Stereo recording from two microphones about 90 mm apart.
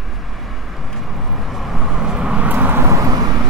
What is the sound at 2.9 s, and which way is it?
Vehicle, 45° right (ahead or behind).